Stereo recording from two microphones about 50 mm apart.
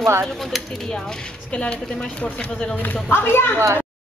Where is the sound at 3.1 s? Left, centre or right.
Left.